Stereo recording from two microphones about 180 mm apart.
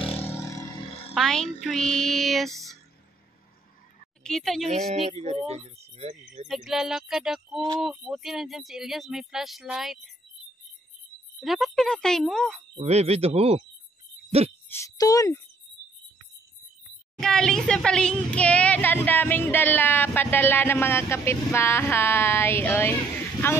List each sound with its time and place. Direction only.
0.0 s a sound: 30° left (ahead or behind)
0.3 s a sound: 15° left (ahead or behind)
1.1 s a woman's voice: 5° left (ahead or behind)
4.2 s speech: 5° left (ahead or behind)
4.6 s speech: 35° right (ahead or behind)
6.4 s speech: centre (ahead or behind)
11.3 s speech: centre (ahead or behind)
12.7 s speech: 35° right (ahead or behind)
14.7 s speech: 20° left (ahead or behind)
17.2 s speech: 5° left (ahead or behind)